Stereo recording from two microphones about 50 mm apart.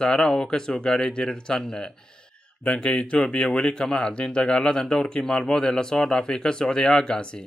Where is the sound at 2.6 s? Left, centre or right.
Left.